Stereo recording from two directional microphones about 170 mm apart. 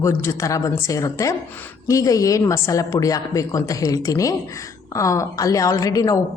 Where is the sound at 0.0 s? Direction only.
15° left (ahead or behind).